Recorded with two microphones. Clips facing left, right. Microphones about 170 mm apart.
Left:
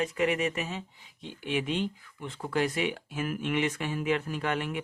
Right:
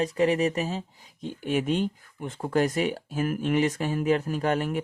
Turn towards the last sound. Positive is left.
turn(degrees=-40)  # may be behind; listen again after turning